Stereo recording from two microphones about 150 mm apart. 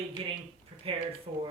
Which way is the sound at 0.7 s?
35° right (ahead or behind).